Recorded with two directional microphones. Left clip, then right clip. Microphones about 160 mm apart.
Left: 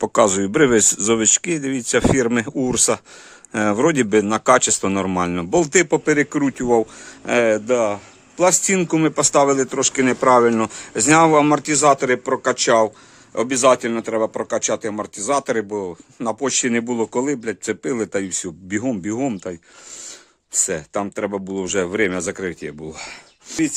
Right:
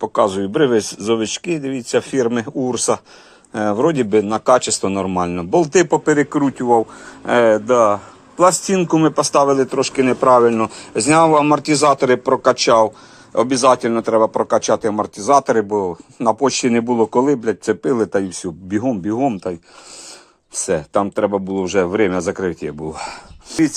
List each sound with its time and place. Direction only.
0.1 s speech: 50° left (ahead or behind); by 8.0 s 25° left (ahead or behind)
8.4 s speech: 35° left (ahead or behind)
20.7 s speech: 15° left (ahead or behind)
23.5 s speech: 25° left (ahead or behind)